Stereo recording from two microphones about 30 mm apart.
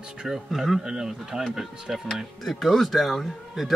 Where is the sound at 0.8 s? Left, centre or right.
Centre.